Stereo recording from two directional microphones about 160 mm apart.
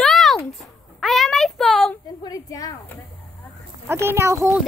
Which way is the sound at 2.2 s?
25° left (ahead or behind).